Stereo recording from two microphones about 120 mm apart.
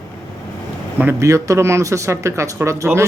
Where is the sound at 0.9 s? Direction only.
20° right (ahead or behind).